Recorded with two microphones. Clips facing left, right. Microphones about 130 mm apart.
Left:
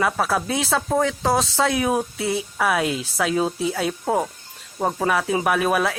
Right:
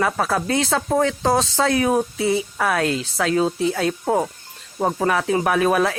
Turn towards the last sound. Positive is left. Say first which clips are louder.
# right 2 dB
turn(degrees=0)  # may be behind; listen again after turning